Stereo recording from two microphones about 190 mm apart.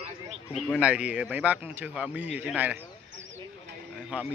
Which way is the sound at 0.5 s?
5° right (ahead or behind).